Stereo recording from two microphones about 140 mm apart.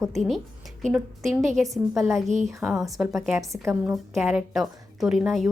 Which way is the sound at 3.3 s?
20° right (ahead or behind).